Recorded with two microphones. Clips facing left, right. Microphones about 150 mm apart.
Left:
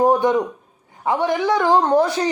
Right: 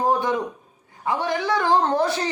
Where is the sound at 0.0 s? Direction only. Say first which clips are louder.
Left 6 dB; 20° left (ahead or behind).